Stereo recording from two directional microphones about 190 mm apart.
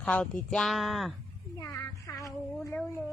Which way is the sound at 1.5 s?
15° left (ahead or behind).